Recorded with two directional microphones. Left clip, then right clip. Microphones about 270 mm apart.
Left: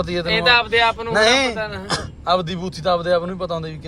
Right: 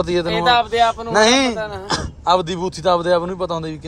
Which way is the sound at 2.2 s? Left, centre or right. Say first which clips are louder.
Right 4 dB; centre.